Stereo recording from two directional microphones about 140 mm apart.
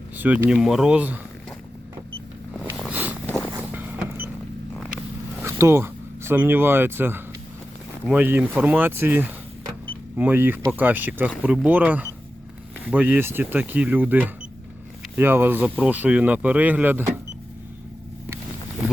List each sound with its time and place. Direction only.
0.2 s speech: 15° right (ahead or behind)
0.5 s speech: centre (ahead or behind)
2.9 s a sound: 10° right (ahead or behind)
3.7 s vehicle: 15° right (ahead or behind)
5.4 s speech: 20° right (ahead or behind)